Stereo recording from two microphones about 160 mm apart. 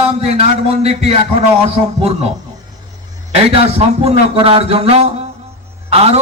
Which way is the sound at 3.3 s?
40° right (ahead or behind).